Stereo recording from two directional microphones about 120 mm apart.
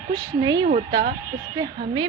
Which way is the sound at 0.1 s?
40° right (ahead or behind).